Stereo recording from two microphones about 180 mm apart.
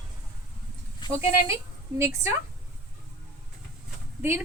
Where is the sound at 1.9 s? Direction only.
15° right (ahead or behind).